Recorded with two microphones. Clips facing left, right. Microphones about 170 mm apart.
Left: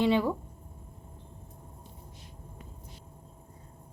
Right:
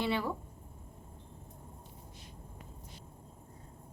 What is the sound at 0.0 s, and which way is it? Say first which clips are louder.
Speech: left 8 dB; 15° left (ahead or behind).